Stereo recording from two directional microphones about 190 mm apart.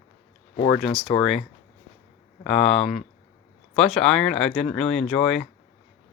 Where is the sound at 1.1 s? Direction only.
15° left (ahead or behind).